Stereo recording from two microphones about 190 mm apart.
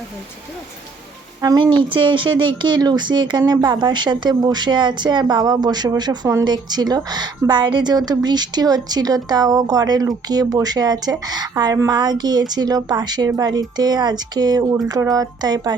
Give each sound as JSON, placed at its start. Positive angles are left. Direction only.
{"t": 1.4, "sound": "speech", "side_deg": -20}